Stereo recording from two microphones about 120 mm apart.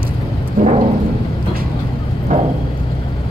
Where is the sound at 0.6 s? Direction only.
90° right.